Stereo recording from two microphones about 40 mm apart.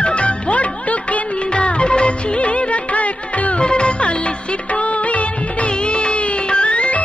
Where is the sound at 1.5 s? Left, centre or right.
Left.